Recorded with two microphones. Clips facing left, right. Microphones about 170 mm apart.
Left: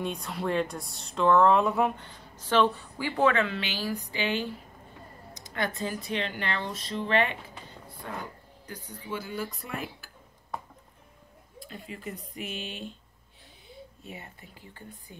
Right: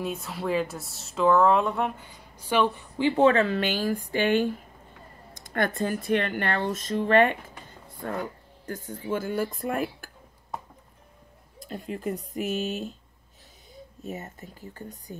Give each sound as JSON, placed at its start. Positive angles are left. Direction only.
{"t": 0.0, "sound": "speech", "side_deg": -5}
{"t": 2.0, "sound": "a woman's voice", "side_deg": -10}
{"t": 11.6, "sound": "speech", "side_deg": -45}